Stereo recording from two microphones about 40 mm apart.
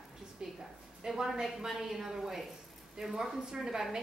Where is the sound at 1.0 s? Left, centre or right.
Centre.